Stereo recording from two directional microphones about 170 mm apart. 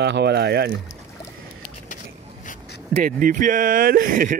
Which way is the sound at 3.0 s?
50° right (ahead or behind).